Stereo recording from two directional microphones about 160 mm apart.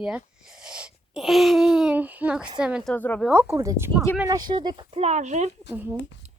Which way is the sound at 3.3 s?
15° right (ahead or behind).